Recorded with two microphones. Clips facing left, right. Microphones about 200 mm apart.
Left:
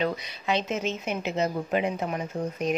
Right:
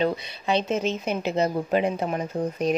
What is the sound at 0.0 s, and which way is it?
Speech, 30° right (ahead or behind).